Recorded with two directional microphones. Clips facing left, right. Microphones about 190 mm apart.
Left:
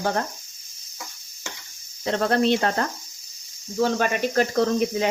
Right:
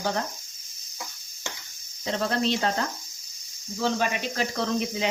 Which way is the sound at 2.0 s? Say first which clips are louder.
Left 5 dB; 60° left (ahead or behind).